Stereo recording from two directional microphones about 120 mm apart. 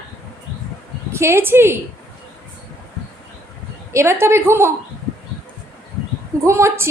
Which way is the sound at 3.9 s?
20° right (ahead or behind).